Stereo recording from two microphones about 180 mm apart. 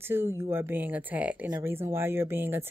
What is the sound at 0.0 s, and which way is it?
Speech, 15° right (ahead or behind).